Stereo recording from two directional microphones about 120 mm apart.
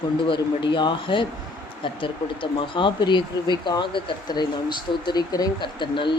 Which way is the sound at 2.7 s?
40° left (ahead or behind).